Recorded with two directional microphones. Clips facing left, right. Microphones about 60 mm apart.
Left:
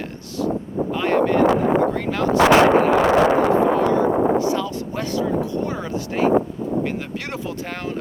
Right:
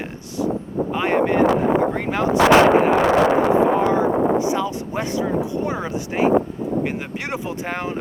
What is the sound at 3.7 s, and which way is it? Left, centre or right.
Speech, centre.